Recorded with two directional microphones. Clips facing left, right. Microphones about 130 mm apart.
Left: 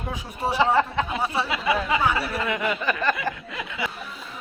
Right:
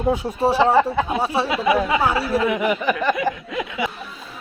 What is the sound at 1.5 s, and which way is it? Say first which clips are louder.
Speech: right 5 dB; 20° right (ahead or behind).